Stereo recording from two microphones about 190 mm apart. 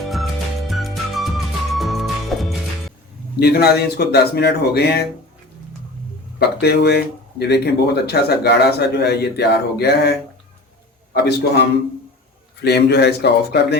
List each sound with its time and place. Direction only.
0.0 s music: centre (ahead or behind)
3.4 s speech: 55° left (ahead or behind)
6.6 s speech: 60° left (ahead or behind)
12.6 s speech: 60° left (ahead or behind)